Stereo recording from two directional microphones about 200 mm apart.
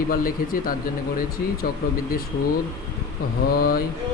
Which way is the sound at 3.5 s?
50° left (ahead or behind).